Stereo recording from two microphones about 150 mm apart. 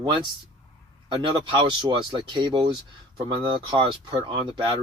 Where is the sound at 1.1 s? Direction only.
35° right (ahead or behind).